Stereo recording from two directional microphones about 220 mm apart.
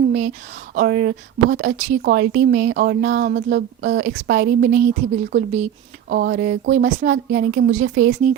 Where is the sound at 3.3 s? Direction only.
55° right (ahead or behind).